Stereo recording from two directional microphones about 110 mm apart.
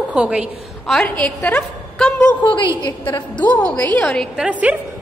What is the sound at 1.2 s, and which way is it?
A woman's voice, 10° left (ahead or behind).